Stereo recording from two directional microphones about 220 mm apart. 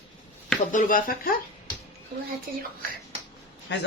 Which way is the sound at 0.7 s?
40° left (ahead or behind).